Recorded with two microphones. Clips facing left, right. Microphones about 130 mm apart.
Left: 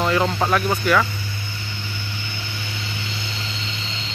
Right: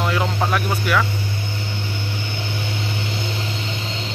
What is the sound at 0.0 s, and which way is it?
Speech, 5° right (ahead or behind).